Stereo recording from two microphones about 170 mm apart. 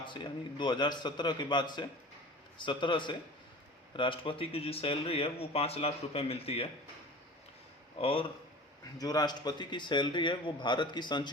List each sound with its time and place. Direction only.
0.0 s a man's voice: 30° left (ahead or behind)
7.9 s speech: 35° left (ahead or behind)
9.0 s a man's voice: 20° left (ahead or behind)